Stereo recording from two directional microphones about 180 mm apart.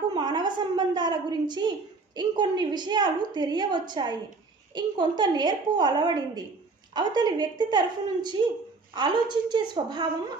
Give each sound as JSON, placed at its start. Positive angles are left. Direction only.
{"t": 0.1, "sound": "a woman's voice", "side_deg": -25}